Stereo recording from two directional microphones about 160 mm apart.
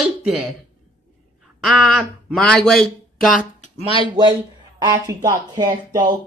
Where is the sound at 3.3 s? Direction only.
50° left (ahead or behind).